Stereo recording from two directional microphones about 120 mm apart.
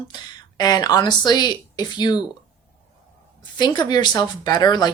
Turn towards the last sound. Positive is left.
turn(degrees=35)  # may be behind; listen again after turning